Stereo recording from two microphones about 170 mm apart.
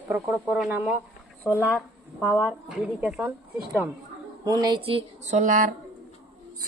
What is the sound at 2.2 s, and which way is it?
A woman's voice, 5° right (ahead or behind).